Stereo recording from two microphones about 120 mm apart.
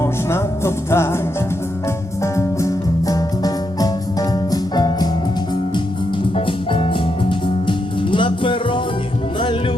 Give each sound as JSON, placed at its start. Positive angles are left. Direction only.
{"t": 0.0, "sound": "music", "side_deg": 20}
{"t": 2.2, "sound": "music", "side_deg": 25}
{"t": 6.3, "sound": "music", "side_deg": 50}